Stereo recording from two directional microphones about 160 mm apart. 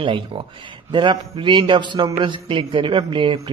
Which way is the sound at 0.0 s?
30° right (ahead or behind).